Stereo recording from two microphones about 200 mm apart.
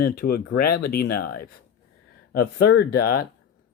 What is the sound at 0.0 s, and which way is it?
Speech, 50° left (ahead or behind).